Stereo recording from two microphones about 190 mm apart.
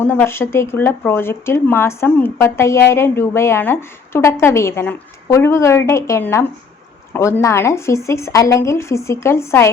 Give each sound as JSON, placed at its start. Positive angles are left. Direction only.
{"t": 0.0, "sound": "speech", "side_deg": 10}